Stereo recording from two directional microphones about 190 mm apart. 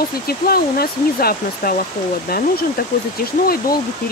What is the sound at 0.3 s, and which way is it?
Speech, 55° left (ahead or behind).